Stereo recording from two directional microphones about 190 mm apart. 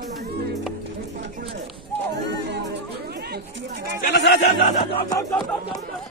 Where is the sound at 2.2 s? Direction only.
65° right (ahead or behind).